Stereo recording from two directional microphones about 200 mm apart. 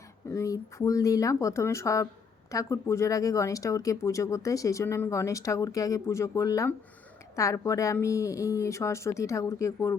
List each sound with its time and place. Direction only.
0.3 s speech: 15° left (ahead or behind)